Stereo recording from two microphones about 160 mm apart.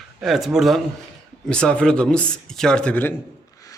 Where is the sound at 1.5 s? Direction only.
5° left (ahead or behind).